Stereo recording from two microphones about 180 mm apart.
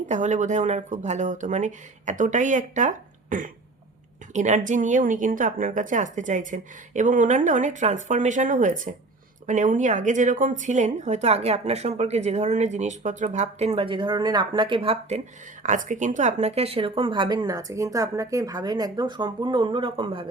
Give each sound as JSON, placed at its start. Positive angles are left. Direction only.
{"t": 0.1, "sound": "a woman's voice", "side_deg": -40}
{"t": 15.6, "sound": "speech", "side_deg": -45}